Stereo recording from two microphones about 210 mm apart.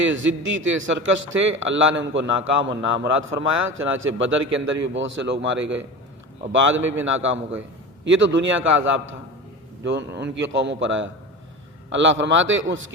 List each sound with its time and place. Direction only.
0.0 s a man's voice: 65° right (ahead or behind)